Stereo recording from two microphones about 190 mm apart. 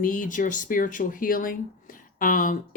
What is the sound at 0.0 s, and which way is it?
Speech, 45° left (ahead or behind).